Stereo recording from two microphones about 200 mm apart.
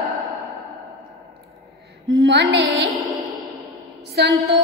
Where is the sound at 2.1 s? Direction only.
60° right (ahead or behind).